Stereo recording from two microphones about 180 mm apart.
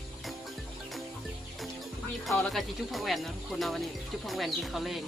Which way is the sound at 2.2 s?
Centre (ahead or behind).